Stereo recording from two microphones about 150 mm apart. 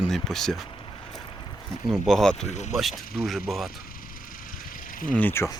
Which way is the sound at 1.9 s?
Centre (ahead or behind).